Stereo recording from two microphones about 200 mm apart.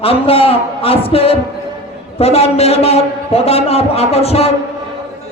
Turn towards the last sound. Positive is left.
turn(degrees=30)  # may be behind; listen again after turning